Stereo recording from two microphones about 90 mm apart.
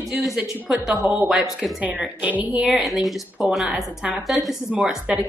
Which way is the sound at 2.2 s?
15° right (ahead or behind).